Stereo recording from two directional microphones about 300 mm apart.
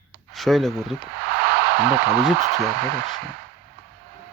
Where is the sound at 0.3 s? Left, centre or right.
Centre.